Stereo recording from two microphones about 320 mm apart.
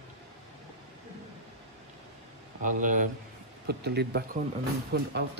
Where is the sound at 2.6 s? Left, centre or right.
Right.